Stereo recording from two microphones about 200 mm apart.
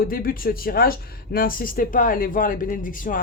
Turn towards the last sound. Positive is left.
turn(degrees=40)  # may be behind; listen again after turning